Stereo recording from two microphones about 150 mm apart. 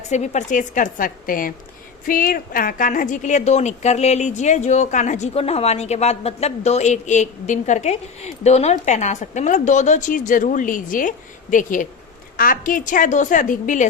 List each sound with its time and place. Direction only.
0.1 s a woman's voice: 50° left (ahead or behind)